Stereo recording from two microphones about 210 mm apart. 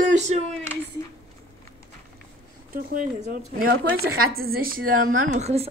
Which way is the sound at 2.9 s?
40° right (ahead or behind).